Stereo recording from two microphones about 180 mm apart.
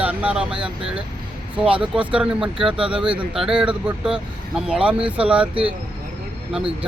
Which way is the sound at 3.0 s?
30° right (ahead or behind).